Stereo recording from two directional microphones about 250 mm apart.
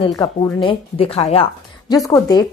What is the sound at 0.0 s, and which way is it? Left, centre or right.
A woman's voice, centre.